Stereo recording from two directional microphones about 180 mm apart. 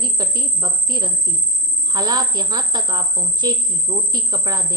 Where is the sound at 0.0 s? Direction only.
25° right (ahead or behind).